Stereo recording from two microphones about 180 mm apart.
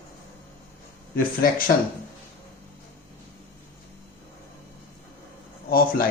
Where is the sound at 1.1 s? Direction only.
50° left (ahead or behind).